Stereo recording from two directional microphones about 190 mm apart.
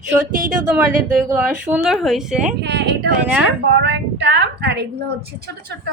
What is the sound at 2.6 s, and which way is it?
Speech, 60° right (ahead or behind).